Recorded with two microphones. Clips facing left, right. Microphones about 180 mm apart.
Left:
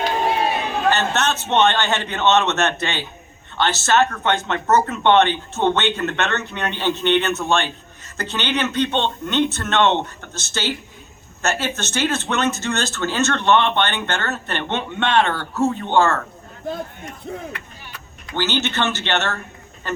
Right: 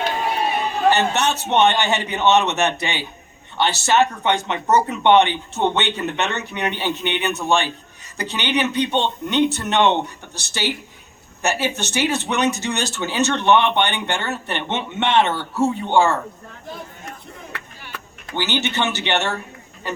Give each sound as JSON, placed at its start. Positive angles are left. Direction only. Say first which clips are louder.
{"t": 0.9, "sound": "speech", "louder": "right 2 dB", "side_deg": -15}
{"t": 18.3, "sound": "speech", "louder": "left 1 dB", "side_deg": -15}